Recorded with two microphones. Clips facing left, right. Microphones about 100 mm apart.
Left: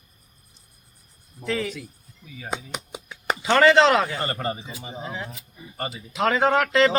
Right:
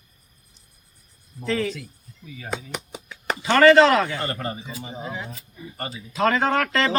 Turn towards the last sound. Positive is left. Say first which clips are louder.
# left 3 dB
turn(degrees=20)  # may be behind; listen again after turning